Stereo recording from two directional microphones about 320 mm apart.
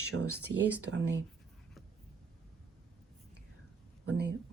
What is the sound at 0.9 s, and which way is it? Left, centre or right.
Speech, right.